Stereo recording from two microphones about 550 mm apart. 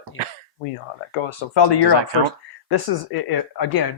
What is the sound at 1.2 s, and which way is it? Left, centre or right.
Speech, left.